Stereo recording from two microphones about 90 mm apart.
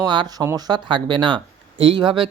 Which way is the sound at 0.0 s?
55° right (ahead or behind).